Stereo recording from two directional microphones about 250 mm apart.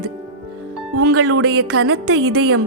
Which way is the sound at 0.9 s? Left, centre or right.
Right.